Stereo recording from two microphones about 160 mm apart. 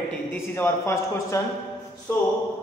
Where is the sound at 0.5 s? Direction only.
15° left (ahead or behind).